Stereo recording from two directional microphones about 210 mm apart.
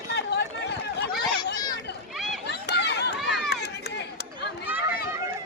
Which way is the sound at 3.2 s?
50° left (ahead or behind).